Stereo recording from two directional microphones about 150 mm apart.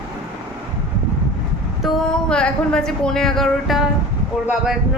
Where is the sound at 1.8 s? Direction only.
5° left (ahead or behind).